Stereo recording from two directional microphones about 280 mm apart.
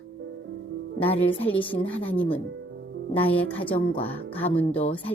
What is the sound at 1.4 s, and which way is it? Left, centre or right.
Speech, centre.